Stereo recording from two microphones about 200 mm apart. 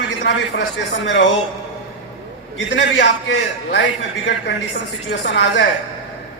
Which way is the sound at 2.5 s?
70° left (ahead or behind).